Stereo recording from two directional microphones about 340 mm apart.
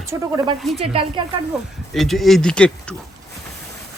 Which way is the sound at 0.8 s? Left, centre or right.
Centre.